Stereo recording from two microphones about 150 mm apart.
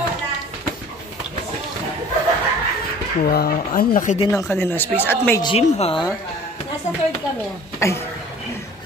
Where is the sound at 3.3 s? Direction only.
85° left; by 4.2 s 60° left (ahead or behind).